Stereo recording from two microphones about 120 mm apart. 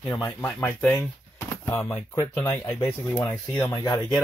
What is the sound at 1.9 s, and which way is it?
Speech, 25° left (ahead or behind).